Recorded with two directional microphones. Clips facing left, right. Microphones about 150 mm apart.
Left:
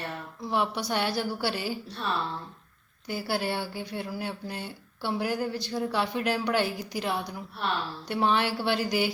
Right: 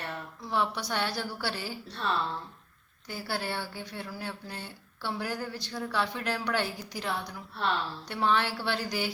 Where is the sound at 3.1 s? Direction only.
10° left (ahead or behind).